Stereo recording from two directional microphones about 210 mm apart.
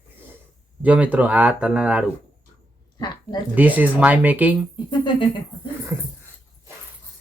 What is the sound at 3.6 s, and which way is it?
Speech, 10° right (ahead or behind).